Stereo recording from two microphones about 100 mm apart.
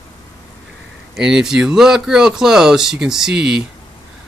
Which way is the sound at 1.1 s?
5° right (ahead or behind).